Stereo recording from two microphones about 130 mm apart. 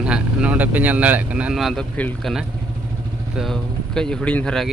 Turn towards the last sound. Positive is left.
turn(degrees=10)  # may be behind; listen again after turning